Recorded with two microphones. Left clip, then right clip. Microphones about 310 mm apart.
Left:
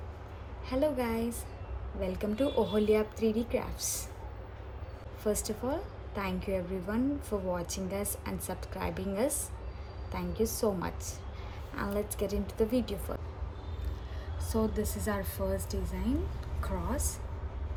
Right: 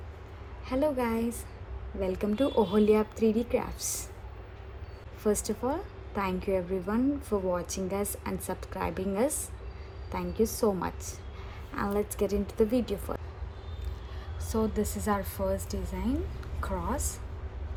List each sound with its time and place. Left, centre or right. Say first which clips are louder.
0.7 s a woman's voice: right 2 dB; centre
5.2 s a woman's voice: right 4 dB; centre
14.5 s a woman's voice: right 2 dB; centre